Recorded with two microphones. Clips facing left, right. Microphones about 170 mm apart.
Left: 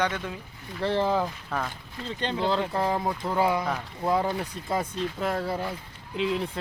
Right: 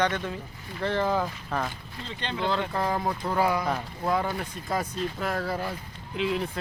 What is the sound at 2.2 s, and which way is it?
Speech, 35° left (ahead or behind).